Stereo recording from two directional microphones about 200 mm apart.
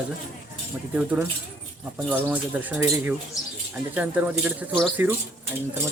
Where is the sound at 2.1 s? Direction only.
5° right (ahead or behind).